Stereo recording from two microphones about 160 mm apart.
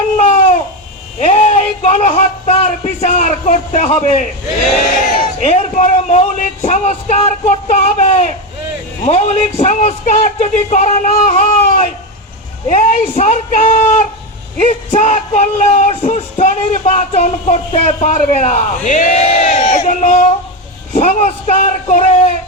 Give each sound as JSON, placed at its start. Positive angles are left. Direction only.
{"t": 0.2, "sound": "a sound", "side_deg": 40}
{"t": 1.2, "sound": "speech", "side_deg": 40}
{"t": 5.5, "sound": "speech", "side_deg": 50}